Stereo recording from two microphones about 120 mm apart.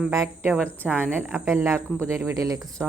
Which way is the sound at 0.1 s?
25° right (ahead or behind).